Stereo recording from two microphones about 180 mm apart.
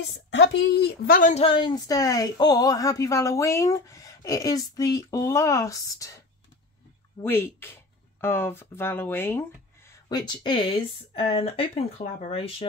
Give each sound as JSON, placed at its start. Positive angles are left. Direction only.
{"t": 0.3, "sound": "a woman's voice", "side_deg": 90}
{"t": 1.3, "sound": "speech", "side_deg": 30}